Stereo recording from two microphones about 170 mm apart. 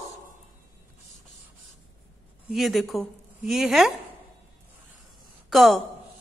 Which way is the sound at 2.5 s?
Centre (ahead or behind).